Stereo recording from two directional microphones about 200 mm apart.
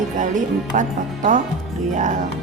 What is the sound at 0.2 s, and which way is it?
Speech, 40° right (ahead or behind).